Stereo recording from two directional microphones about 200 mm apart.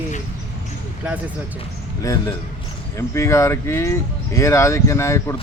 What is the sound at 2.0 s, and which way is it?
Speech, 15° left (ahead or behind).